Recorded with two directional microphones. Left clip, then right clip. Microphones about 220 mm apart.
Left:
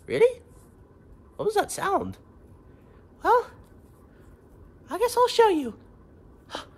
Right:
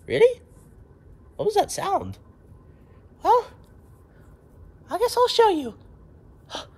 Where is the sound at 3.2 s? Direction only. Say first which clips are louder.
Right 2 dB; 5° left (ahead or behind).